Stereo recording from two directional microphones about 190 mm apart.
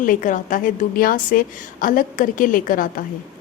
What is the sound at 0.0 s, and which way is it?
A woman's voice, 45° left (ahead or behind).